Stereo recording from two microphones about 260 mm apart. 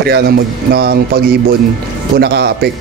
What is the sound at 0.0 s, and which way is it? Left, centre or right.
A man's voice, right.